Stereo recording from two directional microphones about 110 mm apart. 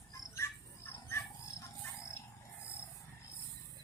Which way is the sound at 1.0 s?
25° left (ahead or behind).